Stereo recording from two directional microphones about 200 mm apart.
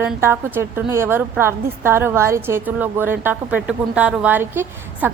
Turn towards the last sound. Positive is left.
turn(degrees=-10)  # may be behind; listen again after turning